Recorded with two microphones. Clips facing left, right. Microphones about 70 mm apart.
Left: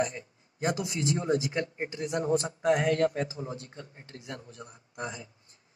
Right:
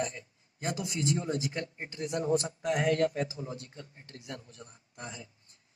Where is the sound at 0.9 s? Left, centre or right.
Left.